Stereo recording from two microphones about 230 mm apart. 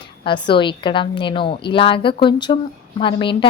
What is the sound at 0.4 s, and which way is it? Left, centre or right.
A woman's voice, left.